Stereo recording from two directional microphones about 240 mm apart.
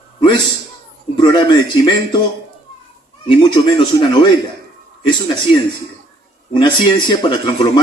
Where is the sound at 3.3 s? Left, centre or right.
Left.